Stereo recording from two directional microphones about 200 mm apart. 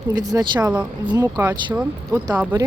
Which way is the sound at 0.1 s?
20° right (ahead or behind).